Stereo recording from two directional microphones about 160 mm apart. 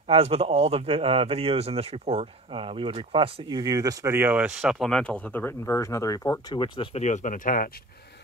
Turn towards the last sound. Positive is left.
turn(degrees=60)  # may be behind; listen again after turning